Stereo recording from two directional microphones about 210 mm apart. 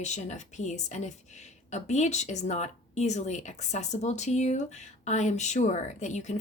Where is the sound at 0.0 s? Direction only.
35° left (ahead or behind).